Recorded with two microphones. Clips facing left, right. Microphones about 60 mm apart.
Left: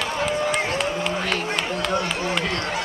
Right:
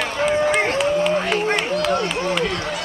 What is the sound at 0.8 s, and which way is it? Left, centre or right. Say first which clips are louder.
Run: right 6 dB; centre.